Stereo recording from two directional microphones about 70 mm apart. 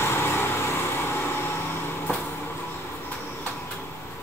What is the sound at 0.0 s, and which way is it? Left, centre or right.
Vehicle, left.